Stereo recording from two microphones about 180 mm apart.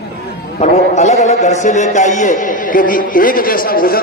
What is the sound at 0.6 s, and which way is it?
A man's voice, 40° left (ahead or behind).